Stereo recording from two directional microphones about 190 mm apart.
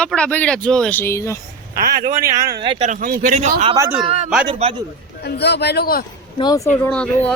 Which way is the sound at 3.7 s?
15° right (ahead or behind).